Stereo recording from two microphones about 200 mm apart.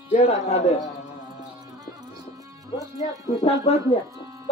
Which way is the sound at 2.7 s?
15° right (ahead or behind).